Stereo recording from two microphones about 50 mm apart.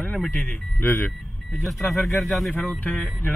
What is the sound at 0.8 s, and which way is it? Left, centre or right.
Speech, left.